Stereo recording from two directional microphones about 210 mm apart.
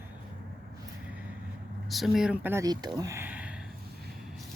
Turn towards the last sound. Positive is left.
turn(degrees=-5)  # may be behind; listen again after turning